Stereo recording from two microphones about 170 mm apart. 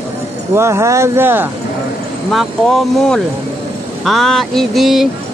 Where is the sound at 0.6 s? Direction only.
15° right (ahead or behind).